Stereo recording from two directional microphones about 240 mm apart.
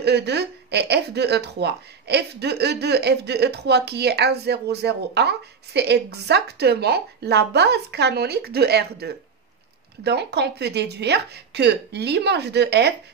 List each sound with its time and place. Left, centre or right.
0.0 s speech: right